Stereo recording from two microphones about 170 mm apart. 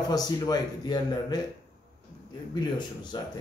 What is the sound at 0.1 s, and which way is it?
Speech, 25° left (ahead or behind).